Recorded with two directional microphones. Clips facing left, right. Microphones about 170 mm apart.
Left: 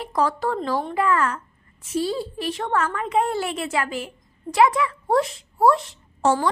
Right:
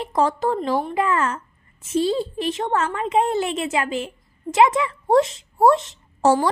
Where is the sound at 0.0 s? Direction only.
20° right (ahead or behind).